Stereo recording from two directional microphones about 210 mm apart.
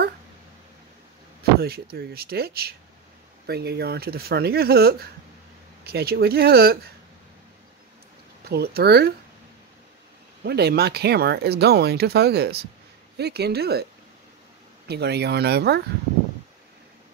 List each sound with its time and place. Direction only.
1.6 s speech: 50° right (ahead or behind)
8.5 s speech: 50° right (ahead or behind)
10.4 s speech: 50° right (ahead or behind)
14.9 s speech: 50° right (ahead or behind)